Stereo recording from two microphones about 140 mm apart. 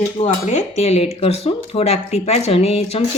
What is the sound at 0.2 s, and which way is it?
A woman's voice, 50° left (ahead or behind).